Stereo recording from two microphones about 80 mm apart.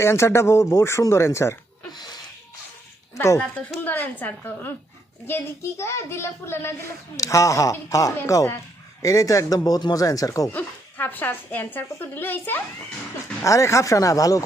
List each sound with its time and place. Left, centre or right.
0.0 s a child's voice: left
1.9 s sneeze: left
3.2 s speech: left
3.8 s a woman's voice: left
10.5 s a woman's voice: left
13.4 s speech: left